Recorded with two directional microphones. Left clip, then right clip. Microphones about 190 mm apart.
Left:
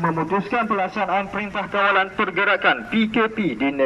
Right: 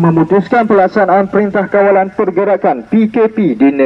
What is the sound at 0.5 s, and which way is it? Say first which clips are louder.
Speech: right 14 dB; 55° right (ahead or behind).